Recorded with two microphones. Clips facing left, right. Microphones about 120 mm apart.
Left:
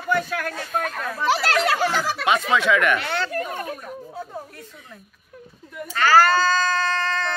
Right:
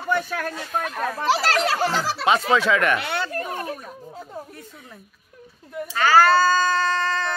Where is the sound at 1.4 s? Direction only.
35° right (ahead or behind).